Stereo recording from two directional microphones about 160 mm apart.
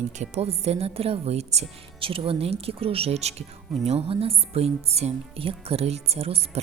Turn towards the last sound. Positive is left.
turn(degrees=-40)  # may be behind; listen again after turning